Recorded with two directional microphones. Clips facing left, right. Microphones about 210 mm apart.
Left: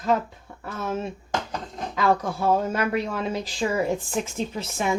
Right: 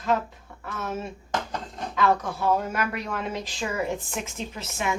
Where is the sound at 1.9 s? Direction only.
35° left (ahead or behind).